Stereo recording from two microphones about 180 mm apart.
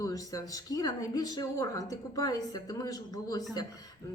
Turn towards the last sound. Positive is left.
turn(degrees=20)  # may be behind; listen again after turning